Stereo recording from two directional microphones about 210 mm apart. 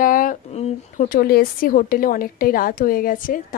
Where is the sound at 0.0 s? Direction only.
40° left (ahead or behind).